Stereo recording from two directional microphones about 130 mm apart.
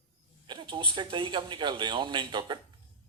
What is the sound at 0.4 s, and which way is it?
A man's voice, 35° right (ahead or behind).